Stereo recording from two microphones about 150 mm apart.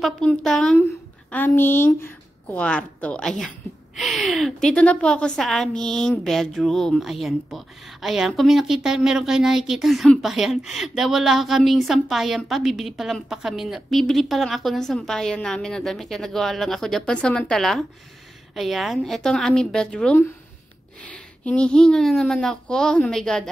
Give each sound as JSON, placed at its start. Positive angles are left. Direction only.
{"t": 0.0, "sound": "a woman's voice", "side_deg": 5}
{"t": 0.7, "sound": "a woman's voice", "side_deg": 15}